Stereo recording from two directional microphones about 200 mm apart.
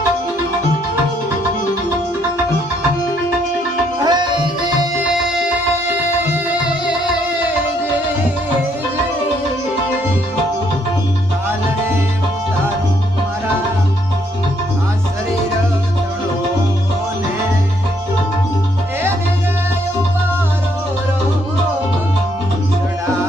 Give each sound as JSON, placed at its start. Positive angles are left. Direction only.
{"t": 4.0, "sound": "music", "side_deg": -20}